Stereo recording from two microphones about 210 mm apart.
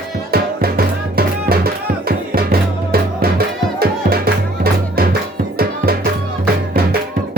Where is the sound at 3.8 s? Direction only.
45° right (ahead or behind).